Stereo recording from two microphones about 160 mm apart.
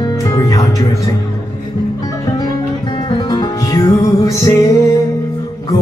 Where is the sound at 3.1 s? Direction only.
25° left (ahead or behind).